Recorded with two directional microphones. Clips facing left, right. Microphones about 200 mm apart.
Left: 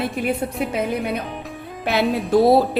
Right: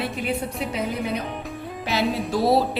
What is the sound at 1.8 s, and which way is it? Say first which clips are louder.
Music: left 4 dB; 55° left (ahead or behind).